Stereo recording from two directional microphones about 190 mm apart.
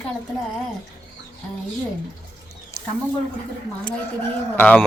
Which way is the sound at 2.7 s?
15° left (ahead or behind).